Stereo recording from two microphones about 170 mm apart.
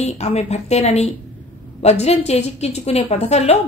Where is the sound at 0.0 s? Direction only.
40° left (ahead or behind).